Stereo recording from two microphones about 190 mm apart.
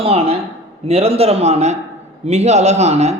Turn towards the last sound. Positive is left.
turn(degrees=-35)  # may be behind; listen again after turning